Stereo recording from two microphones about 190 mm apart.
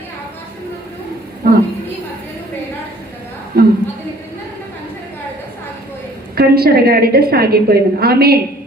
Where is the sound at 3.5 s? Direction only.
55° right (ahead or behind).